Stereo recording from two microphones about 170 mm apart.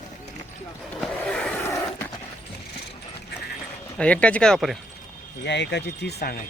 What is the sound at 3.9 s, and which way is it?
Speech, 5° left (ahead or behind).